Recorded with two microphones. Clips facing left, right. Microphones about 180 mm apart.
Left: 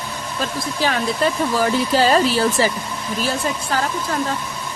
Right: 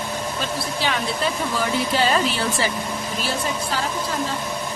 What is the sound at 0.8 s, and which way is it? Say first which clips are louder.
A woman's voice: left 6 dB; 45° left (ahead or behind).